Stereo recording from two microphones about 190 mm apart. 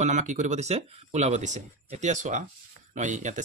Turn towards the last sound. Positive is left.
turn(degrees=-40)  # may be behind; listen again after turning